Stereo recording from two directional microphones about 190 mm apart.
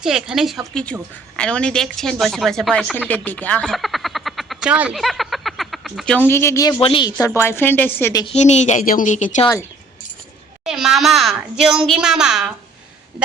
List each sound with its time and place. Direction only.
0.0 s a woman's voice: centre (ahead or behind); by 6.7 s 15° left (ahead or behind)
6.7 s speech: 30° left (ahead or behind)
7.3 s a woman's voice: 10° left (ahead or behind)
8.2 s a woman's voice: 35° left (ahead or behind)
10.6 s a woman's voice: 5° right (ahead or behind)